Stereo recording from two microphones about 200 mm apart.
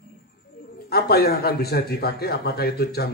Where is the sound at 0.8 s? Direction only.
50° left (ahead or behind).